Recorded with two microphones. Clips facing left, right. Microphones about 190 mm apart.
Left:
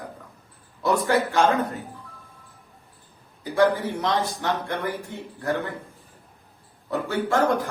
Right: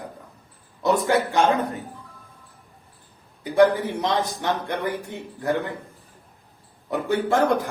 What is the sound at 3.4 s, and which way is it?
A man's voice, 15° right (ahead or behind).